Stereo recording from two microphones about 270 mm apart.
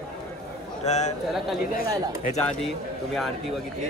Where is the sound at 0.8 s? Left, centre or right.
Left.